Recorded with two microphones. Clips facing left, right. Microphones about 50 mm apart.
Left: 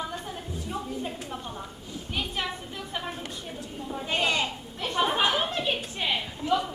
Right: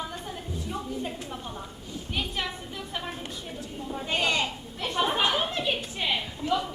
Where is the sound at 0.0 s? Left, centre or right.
Centre.